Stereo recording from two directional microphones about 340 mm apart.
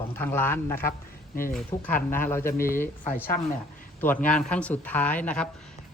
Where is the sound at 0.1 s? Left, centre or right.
Centre.